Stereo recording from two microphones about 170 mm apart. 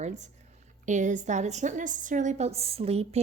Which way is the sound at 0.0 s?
40° right (ahead or behind).